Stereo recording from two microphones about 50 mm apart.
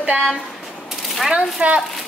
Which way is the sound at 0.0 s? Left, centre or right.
Right.